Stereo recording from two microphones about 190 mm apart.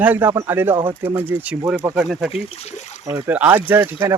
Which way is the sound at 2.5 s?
35° left (ahead or behind).